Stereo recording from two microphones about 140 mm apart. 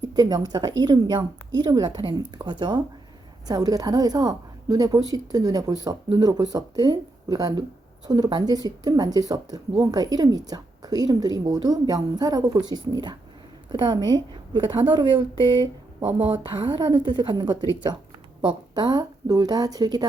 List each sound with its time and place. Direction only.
0.0 s a woman's voice: 30° right (ahead or behind)
16.0 s a woman's voice: 15° right (ahead or behind)
16.6 s speech: 35° right (ahead or behind)